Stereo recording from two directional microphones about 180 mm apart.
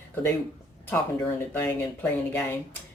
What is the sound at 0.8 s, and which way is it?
Speech, 15° left (ahead or behind).